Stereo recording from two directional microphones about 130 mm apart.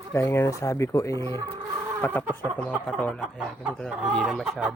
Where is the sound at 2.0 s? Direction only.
15° left (ahead or behind).